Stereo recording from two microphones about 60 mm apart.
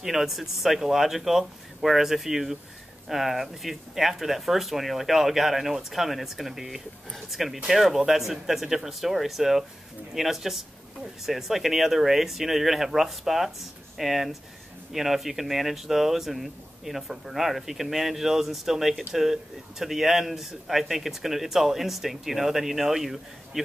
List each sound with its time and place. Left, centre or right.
0.0 s speech: centre